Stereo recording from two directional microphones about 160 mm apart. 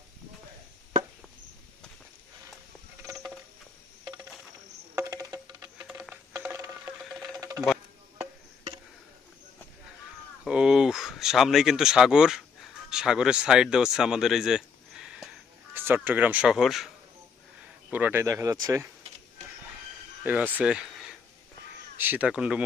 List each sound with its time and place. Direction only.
4.9 s music: 20° right (ahead or behind)
5.8 s a sound: 10° right (ahead or behind)
6.3 s ratchet: 20° right (ahead or behind)
7.3 s music: 25° right (ahead or behind)
10.4 s a sound: 5° right (ahead or behind)
12.9 s speech: 5° right (ahead or behind)
15.7 s a sound: 15° right (ahead or behind)
16.0 s speech: 10° right (ahead or behind)
17.9 s speech: 10° right (ahead or behind)
20.2 s speech: 10° right (ahead or behind)